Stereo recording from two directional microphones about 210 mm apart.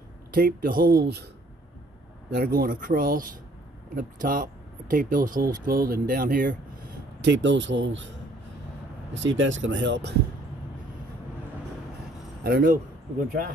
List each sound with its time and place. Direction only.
0.3 s speech: 45° right (ahead or behind)
2.3 s speech: 45° right (ahead or behind)
7.2 s speech: 60° right (ahead or behind)
9.2 s speech: 65° right (ahead or behind)
12.4 s speech: 45° right (ahead or behind)